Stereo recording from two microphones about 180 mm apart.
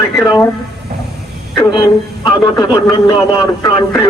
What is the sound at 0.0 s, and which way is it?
Speech, 20° left (ahead or behind).